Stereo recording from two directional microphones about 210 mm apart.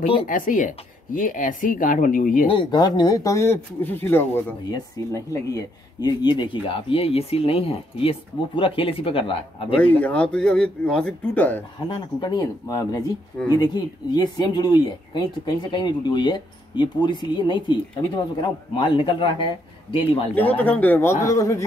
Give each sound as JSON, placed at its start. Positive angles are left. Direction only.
{"t": 0.3, "sound": "speech", "side_deg": 40}
{"t": 2.4, "sound": "speech", "side_deg": 25}
{"t": 9.9, "sound": "speech", "side_deg": 5}
{"t": 11.9, "sound": "speech", "side_deg": 20}
{"t": 20.3, "sound": "speech", "side_deg": 5}